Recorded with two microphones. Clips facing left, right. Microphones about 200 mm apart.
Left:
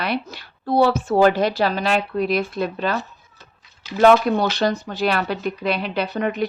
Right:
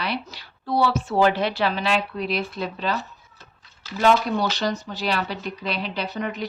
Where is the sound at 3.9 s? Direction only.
55° left (ahead or behind).